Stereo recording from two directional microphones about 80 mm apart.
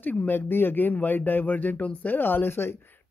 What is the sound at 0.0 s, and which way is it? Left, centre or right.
Speech, left.